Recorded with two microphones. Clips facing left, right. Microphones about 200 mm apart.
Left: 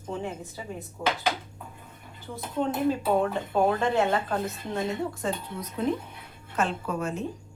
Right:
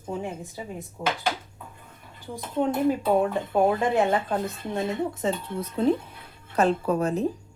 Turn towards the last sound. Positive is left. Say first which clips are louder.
# right 6 dB
turn(degrees=-35)  # may be behind; listen again after turning